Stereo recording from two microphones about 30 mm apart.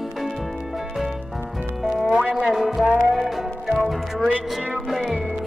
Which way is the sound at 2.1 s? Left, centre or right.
Right.